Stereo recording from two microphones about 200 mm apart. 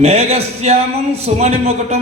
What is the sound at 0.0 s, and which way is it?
Speech, 30° right (ahead or behind).